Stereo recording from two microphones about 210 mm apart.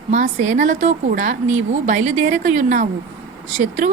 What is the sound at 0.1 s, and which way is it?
Speech, 35° right (ahead or behind).